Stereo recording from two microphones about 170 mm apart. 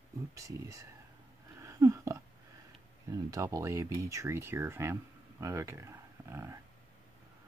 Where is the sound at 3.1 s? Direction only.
20° right (ahead or behind).